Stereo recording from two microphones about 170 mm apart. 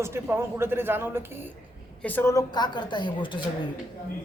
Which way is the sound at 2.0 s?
15° left (ahead or behind).